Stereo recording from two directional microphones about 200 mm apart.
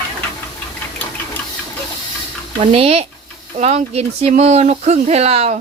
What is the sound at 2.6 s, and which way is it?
Speech, 30° right (ahead or behind).